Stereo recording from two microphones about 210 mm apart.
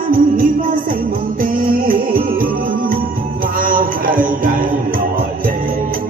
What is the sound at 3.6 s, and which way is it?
Music, 40° right (ahead or behind).